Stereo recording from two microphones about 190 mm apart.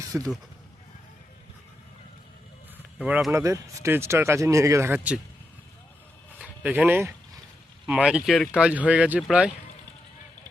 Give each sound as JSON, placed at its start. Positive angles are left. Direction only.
{"t": 0.0, "sound": "speech", "side_deg": -20}
{"t": 2.7, "sound": "a sound", "side_deg": -5}
{"t": 3.3, "sound": "speech", "side_deg": -15}
{"t": 4.9, "sound": "speech", "side_deg": -5}
{"t": 6.4, "sound": "speech", "side_deg": -5}